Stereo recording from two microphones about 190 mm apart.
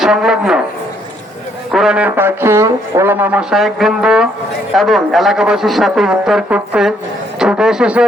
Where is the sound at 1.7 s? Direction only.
5° right (ahead or behind).